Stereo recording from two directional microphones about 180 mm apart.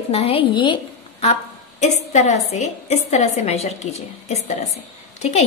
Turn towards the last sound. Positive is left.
turn(degrees=40)  # may be behind; listen again after turning